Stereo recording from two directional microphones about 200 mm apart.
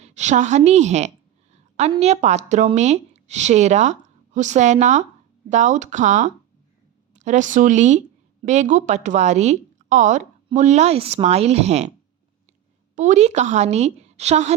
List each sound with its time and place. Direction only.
0.0 s a woman's voice: 35° right (ahead or behind)
13.0 s a woman's voice: 35° right (ahead or behind)